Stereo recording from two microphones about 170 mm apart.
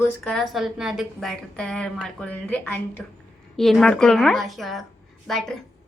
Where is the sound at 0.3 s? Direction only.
Centre (ahead or behind).